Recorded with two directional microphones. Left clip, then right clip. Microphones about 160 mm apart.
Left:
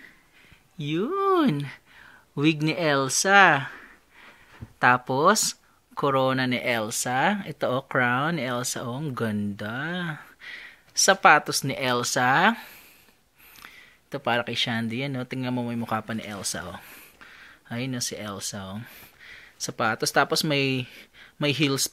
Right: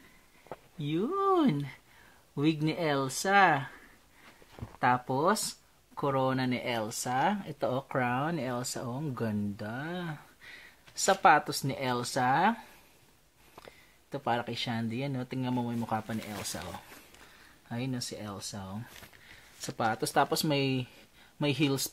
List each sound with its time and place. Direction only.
0.7 s speech: 15° left (ahead or behind)
14.1 s speech: 20° left (ahead or behind)